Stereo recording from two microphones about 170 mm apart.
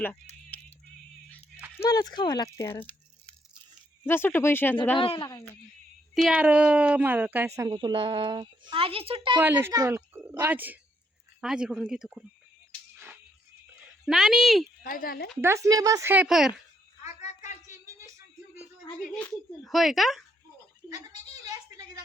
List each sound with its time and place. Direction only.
0.5 s a sound: 10° left (ahead or behind)
1.8 s speech: 20° left (ahead or behind)
4.0 s speech: 15° left (ahead or behind)
4.9 s speech: 30° left (ahead or behind)
6.2 s a woman's voice: 10° right (ahead or behind)
7.7 s speech: 30° right (ahead or behind)
9.4 s a woman's voice: 15° right (ahead or behind)
14.0 s a woman's voice: 5° right (ahead or behind)
14.8 s speech: 55° left (ahead or behind)
15.4 s a woman's voice: 15° right (ahead or behind)
17.2 s a sound: 45° left (ahead or behind)
17.7 s a sound: 20° right (ahead or behind)
19.1 s a woman's voice: centre (ahead or behind)